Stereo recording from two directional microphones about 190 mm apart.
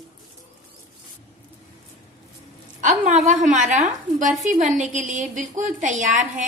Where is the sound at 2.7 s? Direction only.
40° right (ahead or behind).